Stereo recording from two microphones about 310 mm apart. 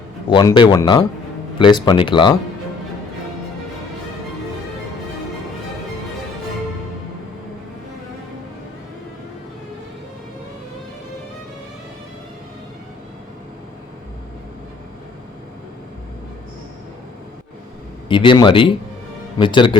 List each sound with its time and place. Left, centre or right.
0.3 s speech: centre
18.1 s speech: centre